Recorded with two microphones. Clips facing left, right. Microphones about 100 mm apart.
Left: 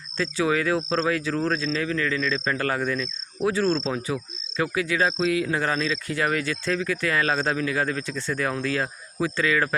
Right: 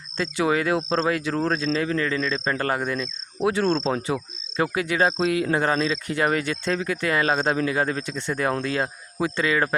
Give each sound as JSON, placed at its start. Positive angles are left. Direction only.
{"t": 0.4, "sound": "speech", "side_deg": -30}
{"t": 3.7, "sound": "speech", "side_deg": -40}